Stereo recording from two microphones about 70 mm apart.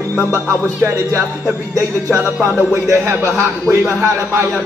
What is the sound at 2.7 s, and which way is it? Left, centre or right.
A man's voice, right.